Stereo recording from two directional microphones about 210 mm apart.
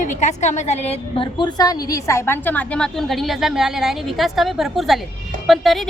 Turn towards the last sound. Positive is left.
turn(degrees=0)  # may be behind; listen again after turning